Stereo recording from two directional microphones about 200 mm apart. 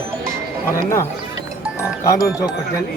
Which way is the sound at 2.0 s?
15° left (ahead or behind).